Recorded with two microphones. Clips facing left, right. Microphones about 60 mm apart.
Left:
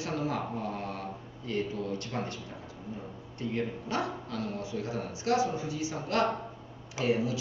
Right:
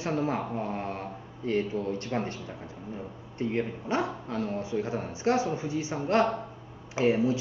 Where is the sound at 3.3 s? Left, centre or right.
Right.